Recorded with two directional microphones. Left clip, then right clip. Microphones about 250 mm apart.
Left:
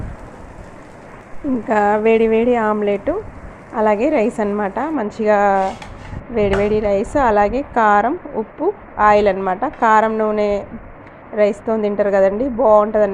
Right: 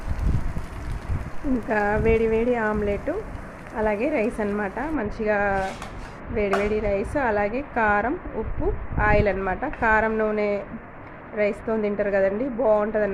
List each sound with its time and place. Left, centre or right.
1.6 s a woman's voice: centre